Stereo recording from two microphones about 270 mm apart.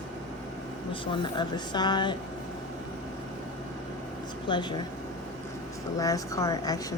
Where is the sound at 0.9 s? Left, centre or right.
Centre.